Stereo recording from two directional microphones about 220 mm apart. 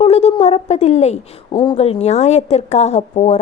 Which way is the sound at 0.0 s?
30° left (ahead or behind).